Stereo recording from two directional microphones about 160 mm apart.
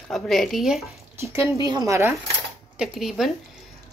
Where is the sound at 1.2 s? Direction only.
15° right (ahead or behind).